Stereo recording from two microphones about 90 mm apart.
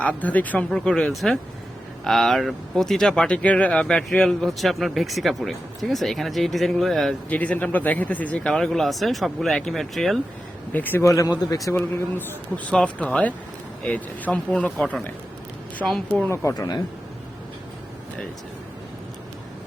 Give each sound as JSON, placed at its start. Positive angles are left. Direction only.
{"t": 0.0, "sound": "speech", "side_deg": 15}
{"t": 0.7, "sound": "speech", "side_deg": 5}
{"t": 7.3, "sound": "speech", "side_deg": 15}
{"t": 8.5, "sound": "speech", "side_deg": 5}
{"t": 10.7, "sound": "a man's voice", "side_deg": 20}
{"t": 11.0, "sound": "a man's voice", "side_deg": 35}
{"t": 11.9, "sound": "a man's voice", "side_deg": 20}
{"t": 12.7, "sound": "speech", "side_deg": 10}
{"t": 15.8, "sound": "speech", "side_deg": -5}
{"t": 16.3, "sound": "a man's voice", "side_deg": 30}
{"t": 16.6, "sound": "speech", "side_deg": 45}